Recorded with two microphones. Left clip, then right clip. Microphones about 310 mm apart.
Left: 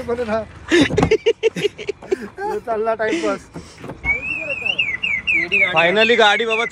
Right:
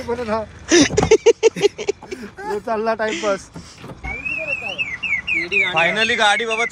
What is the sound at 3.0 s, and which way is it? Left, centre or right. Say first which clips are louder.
Speech: left 1 dB; centre.